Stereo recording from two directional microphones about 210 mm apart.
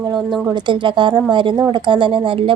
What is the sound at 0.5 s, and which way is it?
A woman's voice, 20° right (ahead or behind).